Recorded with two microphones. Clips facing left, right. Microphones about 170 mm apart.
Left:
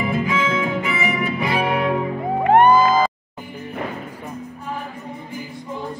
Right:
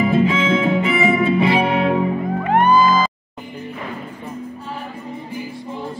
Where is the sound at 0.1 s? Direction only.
25° right (ahead or behind).